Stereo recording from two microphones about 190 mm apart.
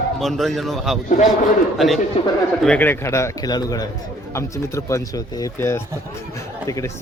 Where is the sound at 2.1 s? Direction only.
30° left (ahead or behind).